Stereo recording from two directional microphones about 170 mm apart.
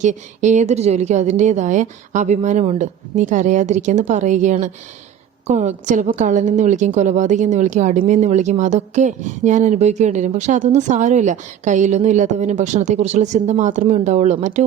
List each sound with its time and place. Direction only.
0.0 s speech: 45° right (ahead or behind)